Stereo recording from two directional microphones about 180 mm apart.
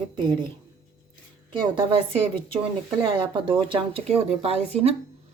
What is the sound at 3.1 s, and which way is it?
Speech, 30° right (ahead or behind).